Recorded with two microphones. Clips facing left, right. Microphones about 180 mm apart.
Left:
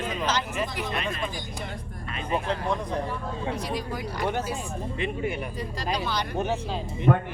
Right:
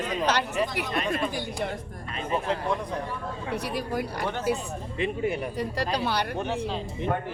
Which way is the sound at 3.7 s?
60° right (ahead or behind).